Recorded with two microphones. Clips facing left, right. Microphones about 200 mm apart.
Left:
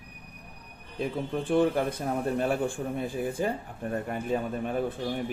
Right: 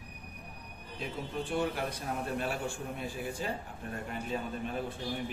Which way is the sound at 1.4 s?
55° left (ahead or behind).